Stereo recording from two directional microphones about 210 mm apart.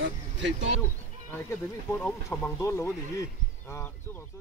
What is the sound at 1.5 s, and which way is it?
Speech, 10° left (ahead or behind).